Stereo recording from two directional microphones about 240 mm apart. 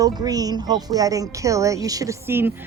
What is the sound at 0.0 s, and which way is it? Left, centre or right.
A woman's voice, centre.